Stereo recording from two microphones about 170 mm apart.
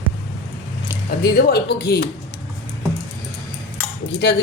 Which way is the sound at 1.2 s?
65° left (ahead or behind).